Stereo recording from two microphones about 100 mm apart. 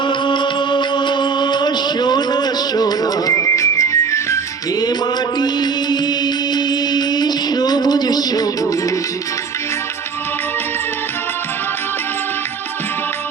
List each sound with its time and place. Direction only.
0.1 s music: 50° left (ahead or behind); by 4.4 s 30° left (ahead or behind)
5.4 s music: 45° left (ahead or behind)